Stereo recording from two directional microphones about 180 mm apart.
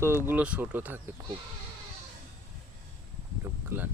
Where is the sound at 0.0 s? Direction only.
15° right (ahead or behind).